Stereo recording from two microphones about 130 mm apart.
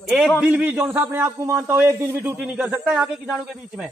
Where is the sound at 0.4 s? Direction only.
10° right (ahead or behind).